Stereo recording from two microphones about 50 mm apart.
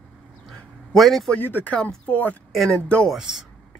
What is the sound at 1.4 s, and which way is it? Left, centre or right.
Speech, left.